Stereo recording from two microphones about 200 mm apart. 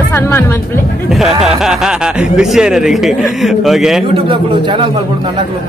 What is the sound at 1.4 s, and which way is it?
Speech, 5° right (ahead or behind).